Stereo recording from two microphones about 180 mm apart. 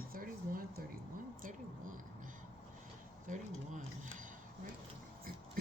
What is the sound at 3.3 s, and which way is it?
Speech, 45° right (ahead or behind).